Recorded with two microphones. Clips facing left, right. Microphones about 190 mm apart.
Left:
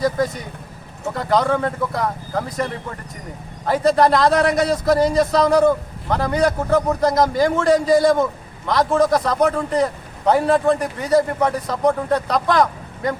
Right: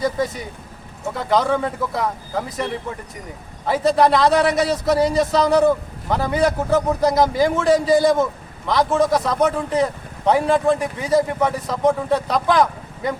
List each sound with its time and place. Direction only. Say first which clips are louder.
0.0 s a man's voice: left 2 dB; centre (ahead or behind)
3.7 s a man's voice: left 1 dB; centre (ahead or behind)